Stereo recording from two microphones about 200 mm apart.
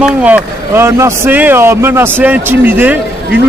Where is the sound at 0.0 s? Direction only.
5° right (ahead or behind).